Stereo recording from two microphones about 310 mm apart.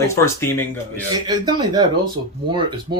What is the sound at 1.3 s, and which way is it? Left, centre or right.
Speech, centre.